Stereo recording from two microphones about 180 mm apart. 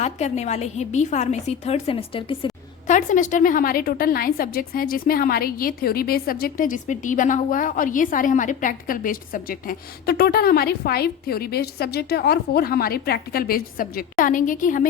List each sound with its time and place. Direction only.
0.0 s a woman's voice: 40° left (ahead or behind)
2.8 s a woman's voice: 45° left (ahead or behind)